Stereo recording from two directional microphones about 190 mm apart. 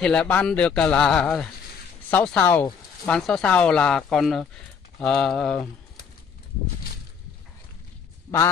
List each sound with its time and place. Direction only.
0.0 s speech: 5° left (ahead or behind)
8.3 s a man's voice: 25° left (ahead or behind)